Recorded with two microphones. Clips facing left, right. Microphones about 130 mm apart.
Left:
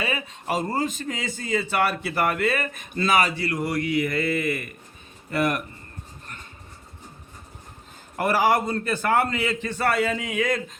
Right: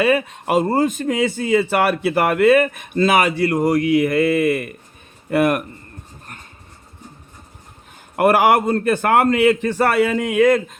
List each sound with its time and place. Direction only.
0.0 s a man's voice: 60° right (ahead or behind)
8.1 s a man's voice: 60° right (ahead or behind)